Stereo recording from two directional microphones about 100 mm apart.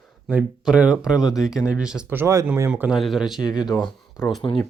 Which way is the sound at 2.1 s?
25° right (ahead or behind).